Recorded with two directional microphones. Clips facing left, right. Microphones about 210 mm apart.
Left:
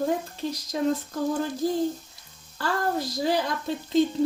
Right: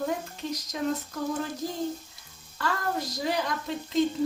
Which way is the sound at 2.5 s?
30° left (ahead or behind).